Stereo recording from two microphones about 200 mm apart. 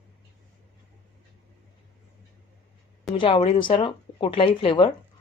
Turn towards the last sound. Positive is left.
turn(degrees=25)  # may be behind; listen again after turning